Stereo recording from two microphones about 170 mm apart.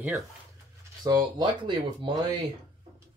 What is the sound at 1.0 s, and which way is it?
Speech, 25° right (ahead or behind).